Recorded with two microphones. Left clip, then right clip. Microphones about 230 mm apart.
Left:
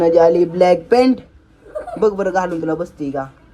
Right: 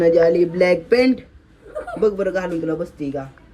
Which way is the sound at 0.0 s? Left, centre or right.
Centre.